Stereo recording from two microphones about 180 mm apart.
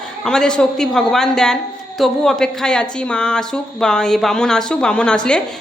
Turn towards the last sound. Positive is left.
turn(degrees=5)  # may be behind; listen again after turning